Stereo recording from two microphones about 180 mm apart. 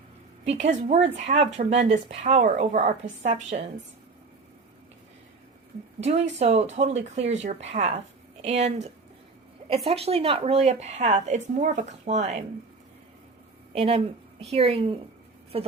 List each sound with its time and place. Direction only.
0.4 s speech: 40° right (ahead or behind)
6.0 s speech: 35° right (ahead or behind)
13.7 s speech: 35° right (ahead or behind)